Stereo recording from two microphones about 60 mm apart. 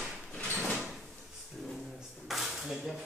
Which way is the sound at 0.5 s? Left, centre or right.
Left.